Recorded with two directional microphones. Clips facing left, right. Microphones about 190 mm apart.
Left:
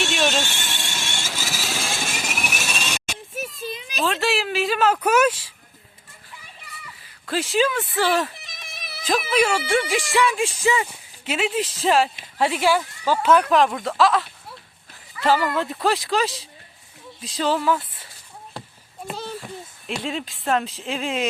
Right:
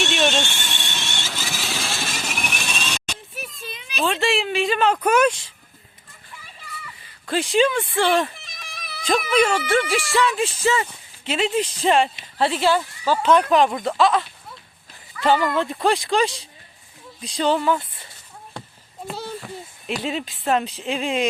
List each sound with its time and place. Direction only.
0.0 s vehicle: centre (ahead or behind)
3.3 s a sound: 40° left (ahead or behind)
4.0 s speech: centre (ahead or behind)
7.0 s speech: centre (ahead or behind)
19.9 s speech: 5° right (ahead or behind)